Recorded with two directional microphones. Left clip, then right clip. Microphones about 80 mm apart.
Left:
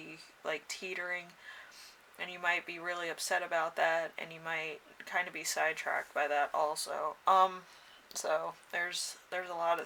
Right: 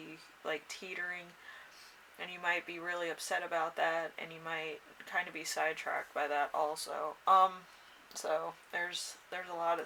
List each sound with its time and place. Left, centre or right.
0.4 s speech: left